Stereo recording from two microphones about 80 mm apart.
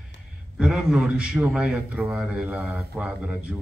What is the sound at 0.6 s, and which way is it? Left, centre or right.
A man's voice, centre.